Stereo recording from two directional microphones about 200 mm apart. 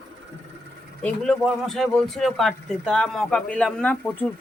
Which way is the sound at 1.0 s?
5° left (ahead or behind).